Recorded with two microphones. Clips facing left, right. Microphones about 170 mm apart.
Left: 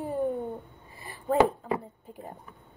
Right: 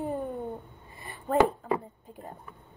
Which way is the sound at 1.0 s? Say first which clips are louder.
Left 1 dB; centre (ahead or behind).